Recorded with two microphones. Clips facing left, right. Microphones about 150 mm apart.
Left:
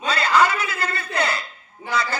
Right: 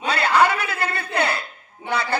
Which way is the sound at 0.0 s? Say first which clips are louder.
Right 1 dB; 60° right (ahead or behind).